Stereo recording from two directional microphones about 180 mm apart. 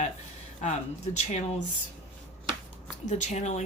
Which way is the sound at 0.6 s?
40° left (ahead or behind).